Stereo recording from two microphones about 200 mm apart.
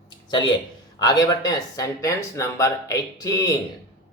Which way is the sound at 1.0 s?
20° left (ahead or behind).